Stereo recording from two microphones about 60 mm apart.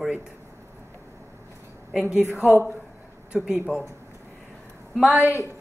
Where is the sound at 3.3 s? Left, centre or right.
Centre.